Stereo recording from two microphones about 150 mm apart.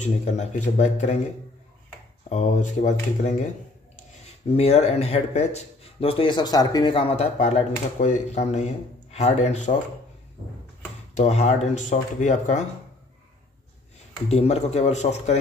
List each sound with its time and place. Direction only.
0.0 s speech: 50° left (ahead or behind)
2.2 s speech: 50° left (ahead or behind)
4.5 s speech: 45° left (ahead or behind)
11.1 s speech: 50° left (ahead or behind)
14.3 s speech: 45° left (ahead or behind)